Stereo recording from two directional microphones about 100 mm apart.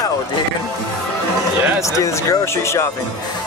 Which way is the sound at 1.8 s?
30° left (ahead or behind).